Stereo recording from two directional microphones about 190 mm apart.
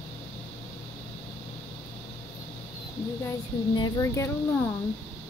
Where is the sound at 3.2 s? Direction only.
20° left (ahead or behind).